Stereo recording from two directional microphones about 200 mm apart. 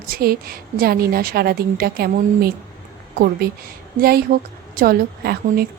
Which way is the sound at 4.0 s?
50° right (ahead or behind).